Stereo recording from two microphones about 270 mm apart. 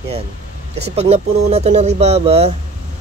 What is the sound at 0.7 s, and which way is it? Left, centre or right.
Speech, right.